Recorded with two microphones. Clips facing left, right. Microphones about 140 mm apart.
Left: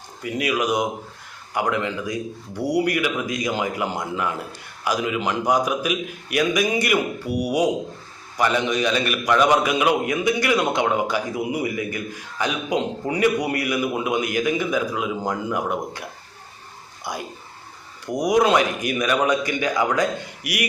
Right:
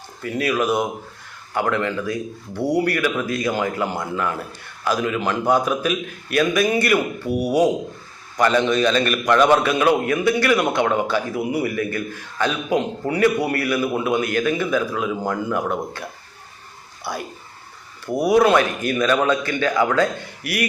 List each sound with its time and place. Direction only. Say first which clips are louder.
0.2 s a man's voice: right 2 dB; 15° left (ahead or behind)